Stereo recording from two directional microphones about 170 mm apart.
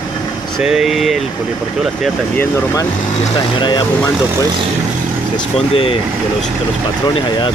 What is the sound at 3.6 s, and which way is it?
Speech, 25° left (ahead or behind).